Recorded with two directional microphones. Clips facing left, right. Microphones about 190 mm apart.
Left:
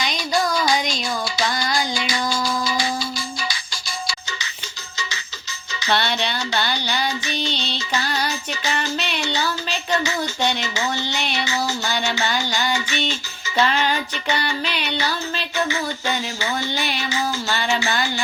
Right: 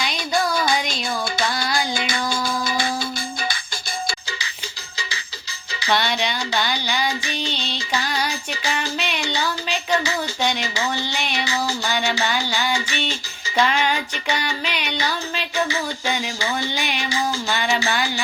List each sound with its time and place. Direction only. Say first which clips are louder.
0.0 s music: left 1 dB; 5° right (ahead or behind)
0.5 s music: left 1 dB; 55° right (ahead or behind)
1.5 s a sound: even; 5° right (ahead or behind)
1.9 s music: even; 55° right (ahead or behind)
4.9 s music: left 2 dB; 30° right (ahead or behind)
5.9 s child singing: even; 10° right (ahead or behind)